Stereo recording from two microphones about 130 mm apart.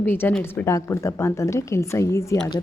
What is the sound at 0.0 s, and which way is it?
A woman's voice, 15° left (ahead or behind).